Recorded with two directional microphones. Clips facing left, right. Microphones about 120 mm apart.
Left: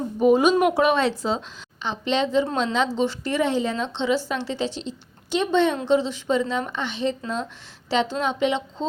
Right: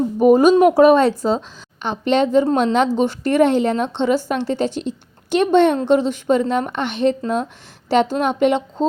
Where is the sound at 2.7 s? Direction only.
50° right (ahead or behind).